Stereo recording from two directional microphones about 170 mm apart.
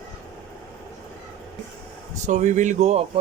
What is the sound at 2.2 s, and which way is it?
Speech, 45° right (ahead or behind).